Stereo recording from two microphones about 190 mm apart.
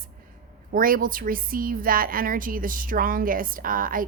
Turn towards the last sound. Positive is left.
turn(degrees=-45)  # may be behind; listen again after turning